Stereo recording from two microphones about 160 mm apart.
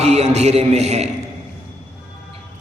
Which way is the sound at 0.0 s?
45° right (ahead or behind).